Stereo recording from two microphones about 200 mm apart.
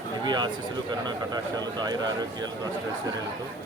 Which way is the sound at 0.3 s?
20° right (ahead or behind).